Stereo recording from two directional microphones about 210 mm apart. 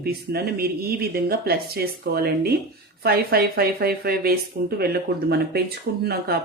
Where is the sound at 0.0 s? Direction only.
45° right (ahead or behind).